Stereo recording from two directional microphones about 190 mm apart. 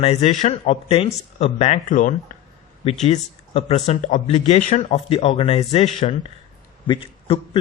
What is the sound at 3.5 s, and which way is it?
Speech, 30° left (ahead or behind).